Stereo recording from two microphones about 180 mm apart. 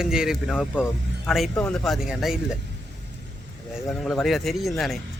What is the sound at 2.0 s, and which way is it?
Speech, 5° right (ahead or behind).